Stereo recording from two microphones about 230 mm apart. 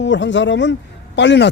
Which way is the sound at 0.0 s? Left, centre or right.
Left.